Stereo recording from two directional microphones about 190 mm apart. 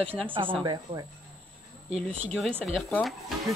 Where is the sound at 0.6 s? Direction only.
20° right (ahead or behind).